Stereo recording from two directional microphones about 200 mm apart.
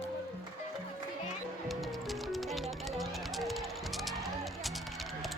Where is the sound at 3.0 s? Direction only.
Centre (ahead or behind).